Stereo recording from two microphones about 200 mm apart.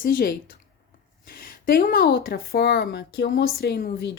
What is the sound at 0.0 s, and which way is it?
A woman's voice, 45° left (ahead or behind).